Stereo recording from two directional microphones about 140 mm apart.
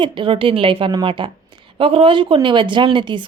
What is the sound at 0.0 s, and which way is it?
A woman's voice, 35° right (ahead or behind).